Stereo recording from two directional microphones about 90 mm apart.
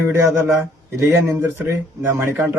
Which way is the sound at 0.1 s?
30° right (ahead or behind).